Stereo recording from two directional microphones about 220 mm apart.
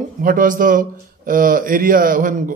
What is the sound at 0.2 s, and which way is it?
Speech, 40° right (ahead or behind).